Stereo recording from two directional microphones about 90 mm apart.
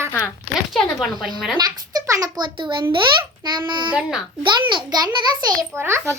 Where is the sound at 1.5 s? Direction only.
50° right (ahead or behind).